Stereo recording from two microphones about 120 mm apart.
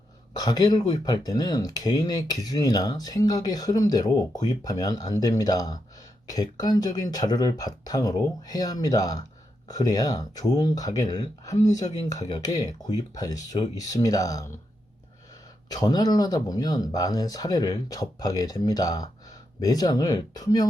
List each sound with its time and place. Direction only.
0.3 s speech: 35° left (ahead or behind)
15.7 s speech: 35° left (ahead or behind)